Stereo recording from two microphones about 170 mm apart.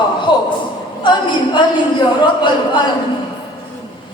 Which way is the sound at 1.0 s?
25° left (ahead or behind).